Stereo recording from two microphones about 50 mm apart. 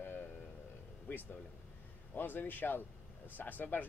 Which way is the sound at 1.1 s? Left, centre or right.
Left.